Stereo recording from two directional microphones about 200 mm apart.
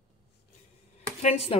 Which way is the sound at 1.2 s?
30° left (ahead or behind).